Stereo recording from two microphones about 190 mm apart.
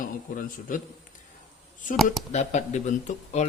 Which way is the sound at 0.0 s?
45° left (ahead or behind).